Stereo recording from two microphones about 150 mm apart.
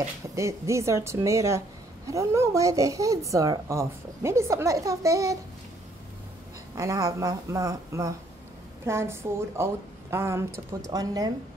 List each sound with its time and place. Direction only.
0.4 s a woman's voice: 20° right (ahead or behind)
6.7 s a woman's voice: 20° right (ahead or behind)